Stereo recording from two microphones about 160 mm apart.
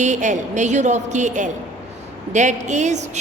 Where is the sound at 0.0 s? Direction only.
50° right (ahead or behind).